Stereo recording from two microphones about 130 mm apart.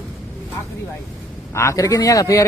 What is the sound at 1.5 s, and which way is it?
Speech, 25° left (ahead or behind).